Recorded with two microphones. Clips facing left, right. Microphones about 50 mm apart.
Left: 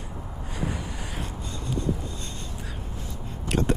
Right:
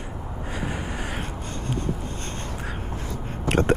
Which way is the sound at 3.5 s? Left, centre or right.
Right.